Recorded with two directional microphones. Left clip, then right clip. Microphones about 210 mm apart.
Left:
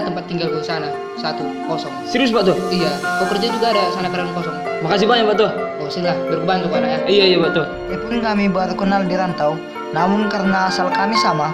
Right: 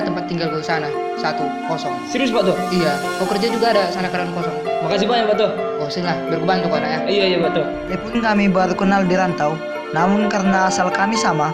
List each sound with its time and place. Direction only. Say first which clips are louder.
2.1 s speech: left 2 dB; 20° left (ahead or behind)
3.3 s speech: right 4 dB; 20° right (ahead or behind)
4.9 s speech: left 3 dB; 25° left (ahead or behind)
6.1 s speech: left 2 dB; 20° right (ahead or behind)
7.1 s speech: left 4 dB; 20° left (ahead or behind)
8.2 s speech: right 3 dB; 10° right (ahead or behind)